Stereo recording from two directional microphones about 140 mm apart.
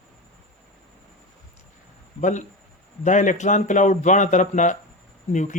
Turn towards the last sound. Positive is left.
turn(degrees=60)  # may be behind; listen again after turning